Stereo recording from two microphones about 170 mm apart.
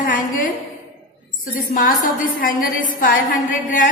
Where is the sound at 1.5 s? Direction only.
50° left (ahead or behind).